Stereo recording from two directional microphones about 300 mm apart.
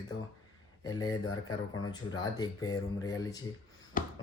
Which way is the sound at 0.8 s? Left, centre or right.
Centre.